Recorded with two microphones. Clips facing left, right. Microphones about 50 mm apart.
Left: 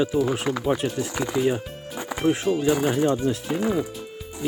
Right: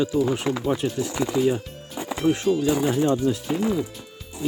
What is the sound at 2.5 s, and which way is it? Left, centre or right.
Speech, left.